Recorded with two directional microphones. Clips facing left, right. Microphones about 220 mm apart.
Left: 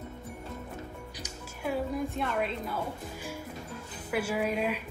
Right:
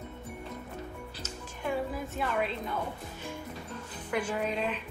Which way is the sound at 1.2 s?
10° left (ahead or behind).